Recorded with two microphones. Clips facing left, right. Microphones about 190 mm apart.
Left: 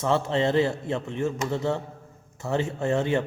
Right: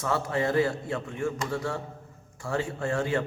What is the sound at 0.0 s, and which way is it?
A man's voice, 25° left (ahead or behind).